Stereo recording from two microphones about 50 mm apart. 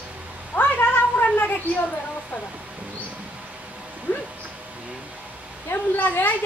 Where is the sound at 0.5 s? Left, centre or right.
Left.